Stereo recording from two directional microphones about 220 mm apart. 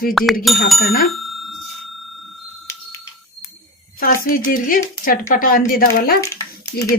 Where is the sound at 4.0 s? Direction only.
40° left (ahead or behind).